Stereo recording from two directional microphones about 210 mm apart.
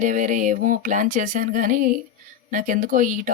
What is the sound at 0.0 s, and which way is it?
Speech, 40° right (ahead or behind).